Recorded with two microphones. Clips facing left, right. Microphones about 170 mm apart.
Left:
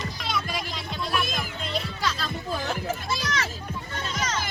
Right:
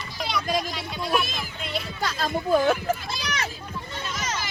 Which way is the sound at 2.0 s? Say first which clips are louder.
Right 4 dB; 50° right (ahead or behind).